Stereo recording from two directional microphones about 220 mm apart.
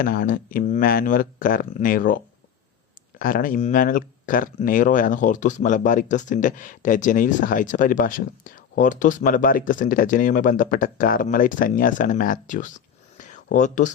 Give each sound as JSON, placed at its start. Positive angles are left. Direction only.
{"t": 0.0, "sound": "speech", "side_deg": 40}
{"t": 3.2, "sound": "speech", "side_deg": 40}
{"t": 13.1, "sound": "a sound", "side_deg": 35}